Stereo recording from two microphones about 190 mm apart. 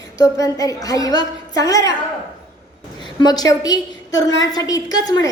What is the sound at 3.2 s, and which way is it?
A woman's voice, 20° left (ahead or behind).